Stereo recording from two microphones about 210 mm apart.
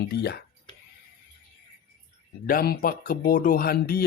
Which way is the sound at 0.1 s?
50° left (ahead or behind).